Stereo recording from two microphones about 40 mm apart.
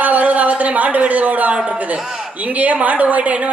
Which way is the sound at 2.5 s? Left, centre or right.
Right.